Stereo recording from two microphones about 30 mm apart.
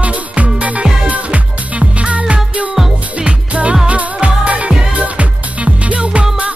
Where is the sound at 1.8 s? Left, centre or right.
Right.